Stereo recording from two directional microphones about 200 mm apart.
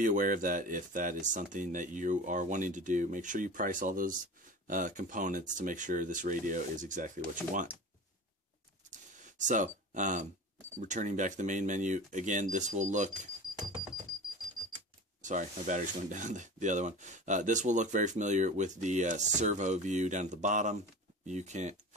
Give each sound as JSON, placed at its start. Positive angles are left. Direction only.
{"t": 0.0, "sound": "speech", "side_deg": -40}
{"t": 8.9, "sound": "a sound", "side_deg": -40}
{"t": 10.8, "sound": "speech", "side_deg": -40}
{"t": 15.2, "sound": "speech", "side_deg": -40}